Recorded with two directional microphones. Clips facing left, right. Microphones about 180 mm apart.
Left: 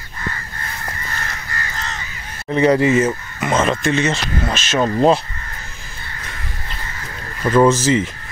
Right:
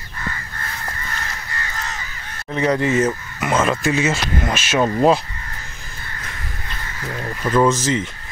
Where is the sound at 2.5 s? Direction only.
Centre (ahead or behind).